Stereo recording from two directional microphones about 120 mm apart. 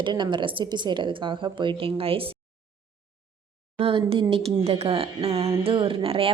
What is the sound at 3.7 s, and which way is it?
A woman's voice, 50° right (ahead or behind).